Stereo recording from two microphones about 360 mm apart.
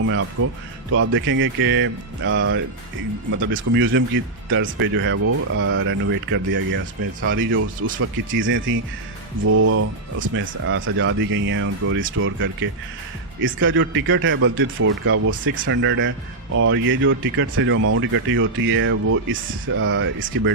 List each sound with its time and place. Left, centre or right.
0.0 s speech: right
9.4 s speech: right